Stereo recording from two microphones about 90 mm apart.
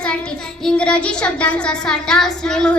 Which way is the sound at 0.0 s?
10° left (ahead or behind).